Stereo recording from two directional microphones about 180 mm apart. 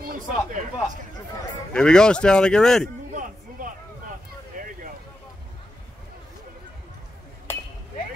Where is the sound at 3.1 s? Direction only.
50° right (ahead or behind).